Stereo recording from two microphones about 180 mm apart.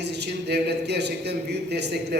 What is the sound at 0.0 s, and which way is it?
A man's voice, 70° right (ahead or behind).